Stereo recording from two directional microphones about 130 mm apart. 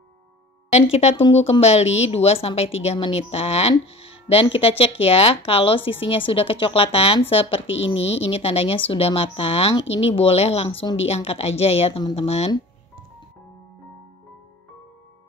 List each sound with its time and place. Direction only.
0.7 s speech: 55° left (ahead or behind)
12.0 s speech: 35° left (ahead or behind)
12.3 s speech: 55° left (ahead or behind)